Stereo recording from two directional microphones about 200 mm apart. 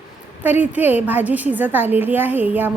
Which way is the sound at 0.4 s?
10° right (ahead or behind).